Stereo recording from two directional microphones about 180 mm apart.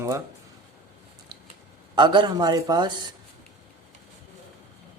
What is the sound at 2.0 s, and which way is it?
Speech, 25° right (ahead or behind).